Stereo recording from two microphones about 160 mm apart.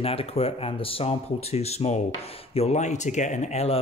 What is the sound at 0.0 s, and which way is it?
A man's voice, 35° left (ahead or behind).